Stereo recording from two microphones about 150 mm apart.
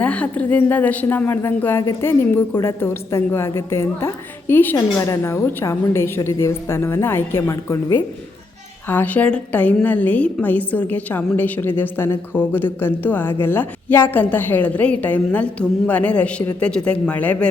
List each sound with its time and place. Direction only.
0.0 s a woman's voice: 10° left (ahead or behind)
8.9 s a woman's voice: 10° left (ahead or behind)